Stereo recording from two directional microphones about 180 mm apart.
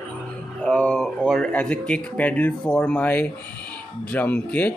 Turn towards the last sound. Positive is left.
turn(degrees=10)  # may be behind; listen again after turning